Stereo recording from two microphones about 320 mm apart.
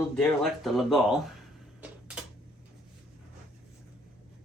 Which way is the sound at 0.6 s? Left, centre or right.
Centre.